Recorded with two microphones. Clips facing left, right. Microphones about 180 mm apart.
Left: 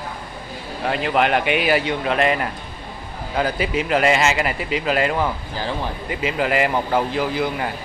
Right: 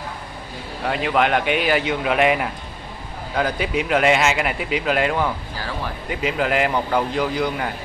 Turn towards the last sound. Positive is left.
turn(degrees=5)  # may be behind; listen again after turning